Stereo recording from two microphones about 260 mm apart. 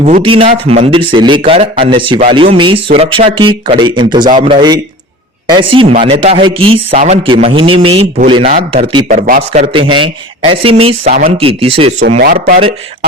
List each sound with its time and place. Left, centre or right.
0.0 s a man's voice: right